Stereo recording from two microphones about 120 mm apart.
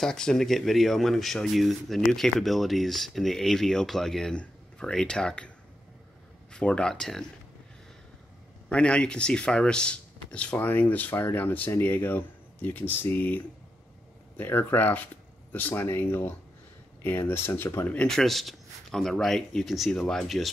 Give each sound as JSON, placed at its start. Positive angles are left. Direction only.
{"t": 0.0, "sound": "speech", "side_deg": 5}
{"t": 6.5, "sound": "speech", "side_deg": 10}
{"t": 8.6, "sound": "speech", "side_deg": 10}
{"t": 17.9, "sound": "speech", "side_deg": 5}